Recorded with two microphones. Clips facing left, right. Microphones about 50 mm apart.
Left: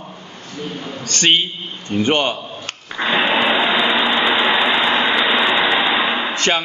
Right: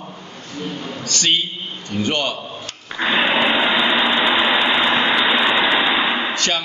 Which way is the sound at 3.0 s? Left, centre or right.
Centre.